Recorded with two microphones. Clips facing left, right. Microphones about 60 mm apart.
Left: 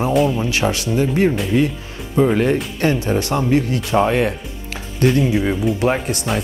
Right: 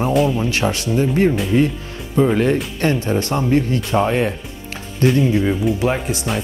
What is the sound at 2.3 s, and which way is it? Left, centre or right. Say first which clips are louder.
Speech: even; left.